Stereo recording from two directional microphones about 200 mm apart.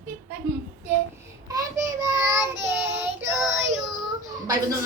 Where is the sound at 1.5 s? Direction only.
15° right (ahead or behind).